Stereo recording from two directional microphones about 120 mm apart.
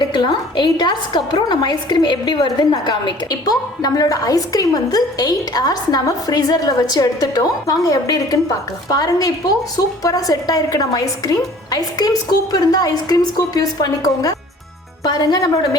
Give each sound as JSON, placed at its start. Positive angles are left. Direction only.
{"t": 0.0, "sound": "a woman's voice", "side_deg": 40}